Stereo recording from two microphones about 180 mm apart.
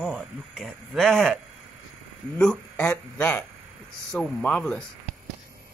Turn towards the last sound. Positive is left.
turn(degrees=5)  # may be behind; listen again after turning